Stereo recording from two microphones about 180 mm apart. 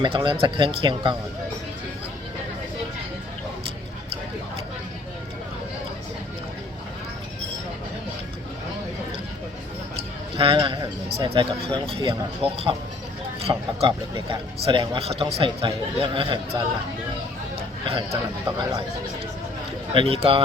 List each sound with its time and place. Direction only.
0.0 s speech: 25° right (ahead or behind)
10.3 s speech: 30° right (ahead or behind)
13.5 s speech: 30° right (ahead or behind)
18.1 s speech: 20° right (ahead or behind)
19.9 s speech: 30° right (ahead or behind)